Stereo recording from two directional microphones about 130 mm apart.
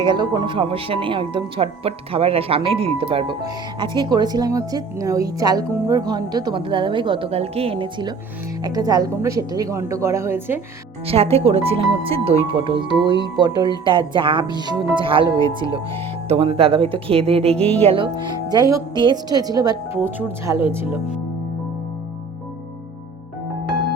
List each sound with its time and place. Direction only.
0.0 s speech: 35° right (ahead or behind)
8.6 s a woman's voice: 30° right (ahead or behind)
11.0 s speech: 50° right (ahead or behind)
15.4 s speech: 25° left (ahead or behind)
16.3 s speech: 45° right (ahead or behind); by 20.0 s 30° right (ahead or behind)
20.1 s speech: 15° right (ahead or behind)